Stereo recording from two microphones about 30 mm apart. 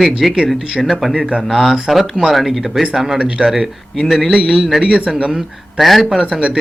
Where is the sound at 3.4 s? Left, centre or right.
Right.